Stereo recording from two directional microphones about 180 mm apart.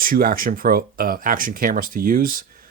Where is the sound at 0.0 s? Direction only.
55° right (ahead or behind).